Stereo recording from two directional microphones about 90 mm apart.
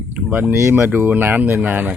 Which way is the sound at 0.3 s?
15° right (ahead or behind).